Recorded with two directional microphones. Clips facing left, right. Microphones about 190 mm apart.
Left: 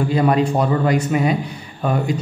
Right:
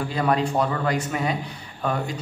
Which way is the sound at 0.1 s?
15° left (ahead or behind).